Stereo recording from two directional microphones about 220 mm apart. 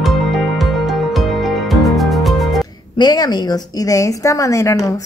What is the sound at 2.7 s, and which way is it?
A woman's voice, 20° left (ahead or behind).